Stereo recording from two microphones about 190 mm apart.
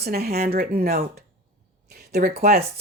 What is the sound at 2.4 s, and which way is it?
Speech, 50° right (ahead or behind).